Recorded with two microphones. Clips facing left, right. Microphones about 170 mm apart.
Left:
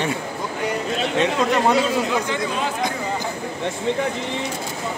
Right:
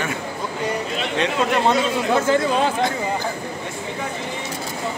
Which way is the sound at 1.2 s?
15° left (ahead or behind).